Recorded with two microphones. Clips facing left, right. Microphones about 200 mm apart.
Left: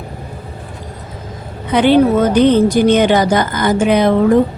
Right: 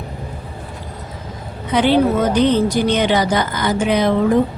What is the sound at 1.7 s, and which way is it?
A woman's voice, 60° left (ahead or behind).